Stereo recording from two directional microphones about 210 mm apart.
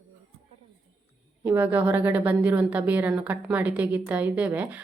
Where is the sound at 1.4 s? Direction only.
10° right (ahead or behind).